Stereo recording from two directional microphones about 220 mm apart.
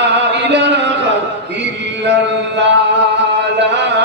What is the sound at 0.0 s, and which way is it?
Chant, 50° right (ahead or behind).